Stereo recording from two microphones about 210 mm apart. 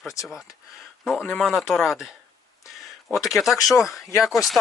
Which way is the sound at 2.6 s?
Centre (ahead or behind).